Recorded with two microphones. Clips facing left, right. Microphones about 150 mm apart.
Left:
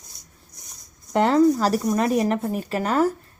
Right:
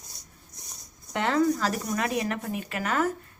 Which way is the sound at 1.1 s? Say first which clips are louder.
Left 7 dB; 35° left (ahead or behind).